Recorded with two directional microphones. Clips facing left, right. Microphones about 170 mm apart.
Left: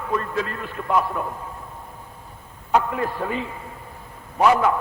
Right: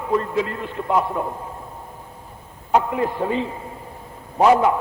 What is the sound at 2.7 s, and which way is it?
A man's voice, 20° right (ahead or behind).